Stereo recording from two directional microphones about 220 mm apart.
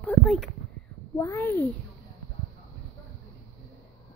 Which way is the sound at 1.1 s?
10° left (ahead or behind).